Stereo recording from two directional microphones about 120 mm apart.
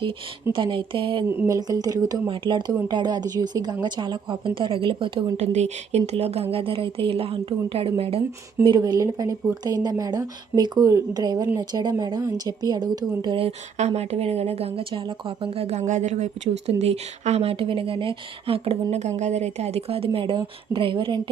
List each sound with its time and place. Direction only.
0.5 s speech: 45° right (ahead or behind)
1.5 s a woman's voice: 30° right (ahead or behind)
2.2 s a woman's voice: 45° right (ahead or behind)
5.4 s speech: 70° right (ahead or behind); by 8.2 s 50° right (ahead or behind)
8.6 s a woman's voice: 35° right (ahead or behind)
13.7 s speech: 65° right (ahead or behind); by 21.2 s 45° right (ahead or behind)